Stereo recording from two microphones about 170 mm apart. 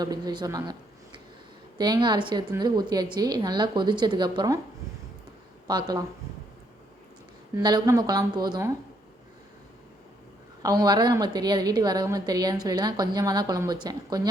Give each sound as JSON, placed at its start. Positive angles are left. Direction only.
{"t": 0.0, "sound": "a woman's voice", "side_deg": -25}
{"t": 5.6, "sound": "a woman's voice", "side_deg": -25}
{"t": 7.6, "sound": "a woman's voice", "side_deg": -25}
{"t": 10.6, "sound": "a woman's voice", "side_deg": -25}